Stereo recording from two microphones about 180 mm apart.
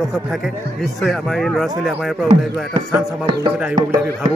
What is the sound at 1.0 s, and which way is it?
Speech, centre (ahead or behind).